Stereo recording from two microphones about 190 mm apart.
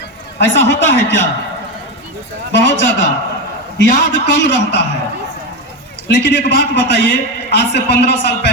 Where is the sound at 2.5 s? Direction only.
65° left (ahead or behind).